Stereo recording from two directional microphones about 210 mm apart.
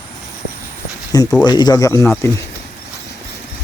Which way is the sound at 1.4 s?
20° left (ahead or behind).